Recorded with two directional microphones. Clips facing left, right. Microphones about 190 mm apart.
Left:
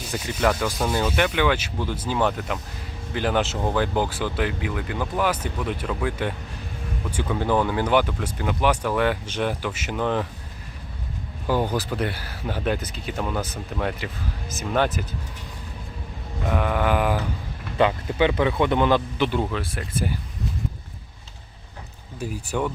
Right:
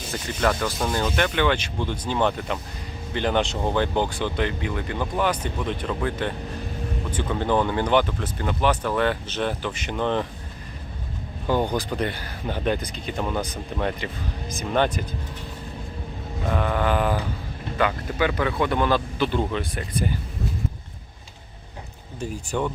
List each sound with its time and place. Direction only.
0.1 s speech: 10° left (ahead or behind)
11.4 s speech: 5° left (ahead or behind)
16.4 s speech: 10° left (ahead or behind)
17.7 s speech: 25° left (ahead or behind)
19.5 s speech: centre (ahead or behind)
22.5 s speech: 5° left (ahead or behind)